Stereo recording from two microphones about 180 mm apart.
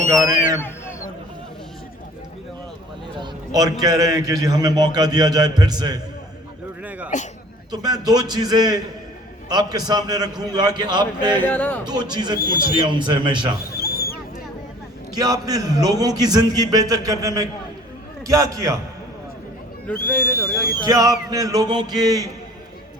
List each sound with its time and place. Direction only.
0.1 s a man's voice: 20° right (ahead or behind)
3.2 s a man's voice: 20° right (ahead or behind)
7.1 s a man's voice: 40° left (ahead or behind)
7.7 s a man's voice: 20° right (ahead or behind)
11.4 s speech: 10° left (ahead or behind)
11.9 s a man's voice: 25° right (ahead or behind)
13.7 s a sound: 60° left (ahead or behind)
15.2 s a man's voice: 20° right (ahead or behind)
19.9 s speech: 10° left (ahead or behind)
20.8 s a man's voice: 20° right (ahead or behind)